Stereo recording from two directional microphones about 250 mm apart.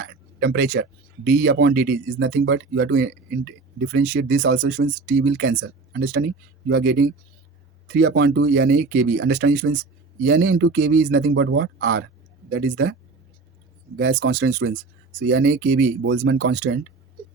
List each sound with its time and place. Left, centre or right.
0.0 s speech: right
4.4 s speech: right
5.0 s speech: right
15.4 s speech: right